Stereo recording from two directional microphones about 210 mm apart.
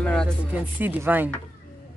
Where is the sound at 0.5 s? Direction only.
10° right (ahead or behind).